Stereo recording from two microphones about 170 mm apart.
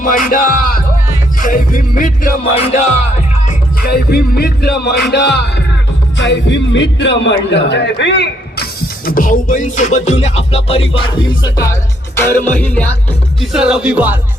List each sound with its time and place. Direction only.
0.0 s music: 55° left (ahead or behind)
2.4 s music: 40° left (ahead or behind)
3.4 s music: 60° left (ahead or behind); by 5.6 s 90° left
6.1 s speech: 90° left
9.0 s music: 55° left (ahead or behind); by 12.9 s 10° left (ahead or behind)
13.4 s music: 5° right (ahead or behind)